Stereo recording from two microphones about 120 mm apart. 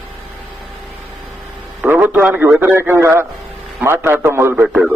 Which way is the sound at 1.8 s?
15° right (ahead or behind).